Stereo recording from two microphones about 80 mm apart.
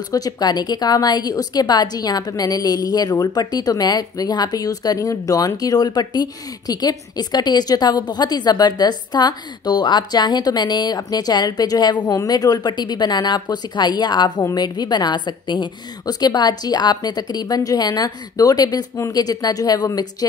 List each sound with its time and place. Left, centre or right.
0.1 s a woman's voice: left
12.2 s speech: left
12.7 s a woman's voice: left